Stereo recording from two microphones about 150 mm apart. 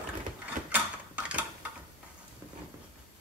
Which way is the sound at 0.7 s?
10° right (ahead or behind).